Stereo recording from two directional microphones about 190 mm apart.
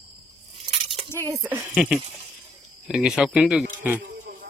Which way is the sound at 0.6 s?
25° right (ahead or behind).